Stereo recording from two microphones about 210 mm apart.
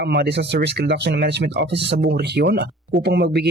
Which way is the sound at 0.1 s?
50° right (ahead or behind).